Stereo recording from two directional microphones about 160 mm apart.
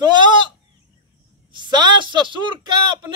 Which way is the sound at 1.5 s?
30° right (ahead or behind).